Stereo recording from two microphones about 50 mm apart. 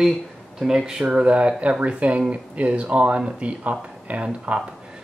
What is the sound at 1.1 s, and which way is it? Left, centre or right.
Speech, right.